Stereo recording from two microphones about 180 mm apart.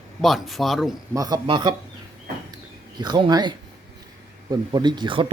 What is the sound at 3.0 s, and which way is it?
Speech, 25° right (ahead or behind).